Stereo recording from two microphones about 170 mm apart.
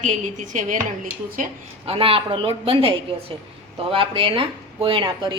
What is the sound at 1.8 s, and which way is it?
A woman's voice, 35° right (ahead or behind).